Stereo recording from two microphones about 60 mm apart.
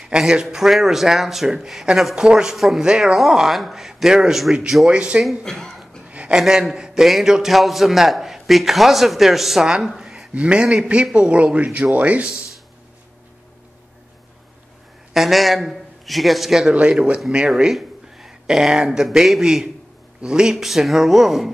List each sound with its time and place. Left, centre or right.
0.0 s a man's voice: centre
2.5 s a man's voice: centre
5.4 s speech: centre
6.0 s a sound: right
6.3 s a man's voice: centre
9.9 s gasp: centre
10.3 s a man's voice: right
15.1 s a man's voice: centre
17.5 s a sound: centre
19.0 s a man's voice: centre